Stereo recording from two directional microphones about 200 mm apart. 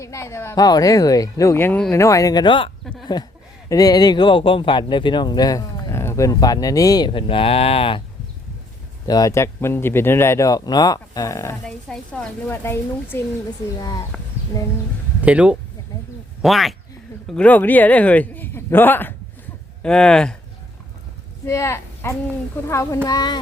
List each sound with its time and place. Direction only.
0.0 s speech: 15° left (ahead or behind)
9.0 s speech: 20° left (ahead or behind)
11.6 s speech: 5° left (ahead or behind)
15.2 s speech: 5° right (ahead or behind)
21.4 s speech: 15° left (ahead or behind)